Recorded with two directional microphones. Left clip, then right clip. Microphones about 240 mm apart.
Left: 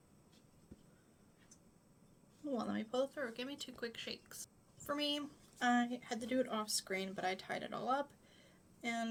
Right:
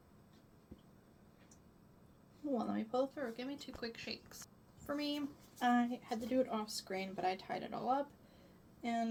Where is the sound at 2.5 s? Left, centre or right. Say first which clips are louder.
Right 2 dB; left.